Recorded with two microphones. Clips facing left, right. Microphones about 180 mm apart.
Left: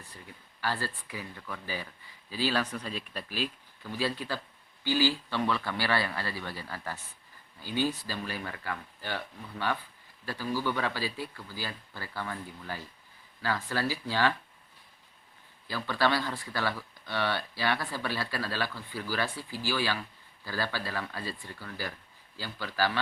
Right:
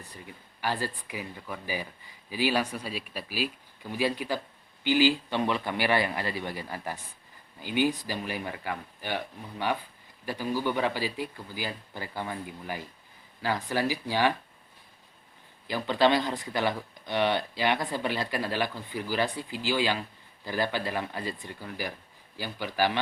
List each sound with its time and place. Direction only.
0.6 s speech: 15° right (ahead or behind)
15.6 s speech: 20° right (ahead or behind)